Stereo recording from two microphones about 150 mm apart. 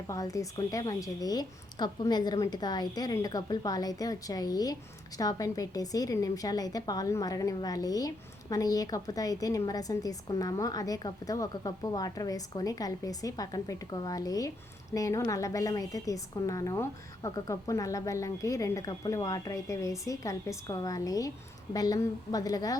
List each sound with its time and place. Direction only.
0.1 s a woman's voice: 20° left (ahead or behind)